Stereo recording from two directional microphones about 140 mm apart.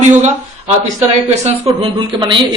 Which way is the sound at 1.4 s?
40° right (ahead or behind).